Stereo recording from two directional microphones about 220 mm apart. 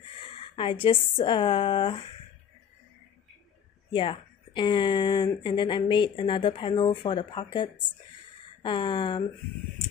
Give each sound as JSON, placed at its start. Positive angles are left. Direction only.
{"t": 0.2, "sound": "a woman's voice", "side_deg": 25}
{"t": 3.9, "sound": "speech", "side_deg": 25}